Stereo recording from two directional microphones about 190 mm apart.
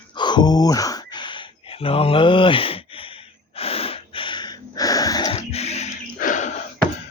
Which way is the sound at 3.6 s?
30° left (ahead or behind).